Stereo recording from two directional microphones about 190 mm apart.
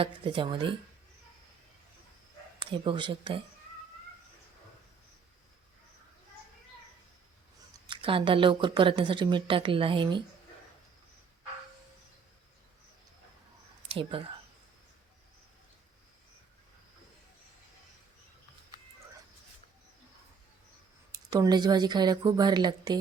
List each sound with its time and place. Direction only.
0.0 s a woman's voice: 25° right (ahead or behind)
2.6 s a woman's voice: 25° right (ahead or behind)
7.9 s a woman's voice: 25° right (ahead or behind)
13.8 s speech: 25° right (ahead or behind)
21.1 s a woman's voice: 20° right (ahead or behind)